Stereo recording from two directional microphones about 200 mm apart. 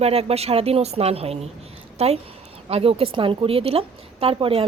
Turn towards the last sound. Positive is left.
turn(degrees=-30)  # may be behind; listen again after turning